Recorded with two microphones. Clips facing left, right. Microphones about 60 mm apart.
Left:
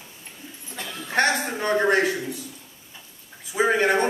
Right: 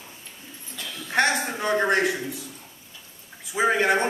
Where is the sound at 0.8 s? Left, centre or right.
Left.